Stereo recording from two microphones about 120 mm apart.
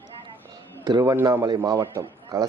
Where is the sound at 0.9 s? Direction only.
35° right (ahead or behind).